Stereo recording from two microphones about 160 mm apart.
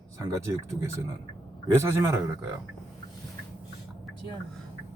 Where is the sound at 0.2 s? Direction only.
20° right (ahead or behind).